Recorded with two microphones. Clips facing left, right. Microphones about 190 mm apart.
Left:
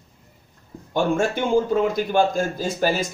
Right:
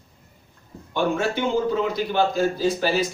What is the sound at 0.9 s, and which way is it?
A man's voice, 50° left (ahead or behind).